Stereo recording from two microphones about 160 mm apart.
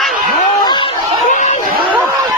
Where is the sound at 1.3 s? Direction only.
50° left (ahead or behind).